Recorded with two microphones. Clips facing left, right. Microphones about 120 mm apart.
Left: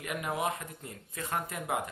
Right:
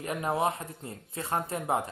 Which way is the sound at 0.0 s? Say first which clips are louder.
Right 4 dB; 35° right (ahead or behind).